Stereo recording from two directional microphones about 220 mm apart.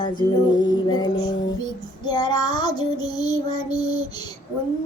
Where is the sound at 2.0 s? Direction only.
20° left (ahead or behind).